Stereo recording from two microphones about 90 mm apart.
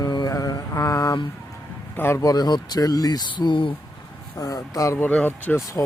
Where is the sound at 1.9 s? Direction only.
25° left (ahead or behind).